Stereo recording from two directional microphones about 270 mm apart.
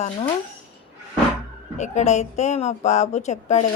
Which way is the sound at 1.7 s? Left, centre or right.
Left.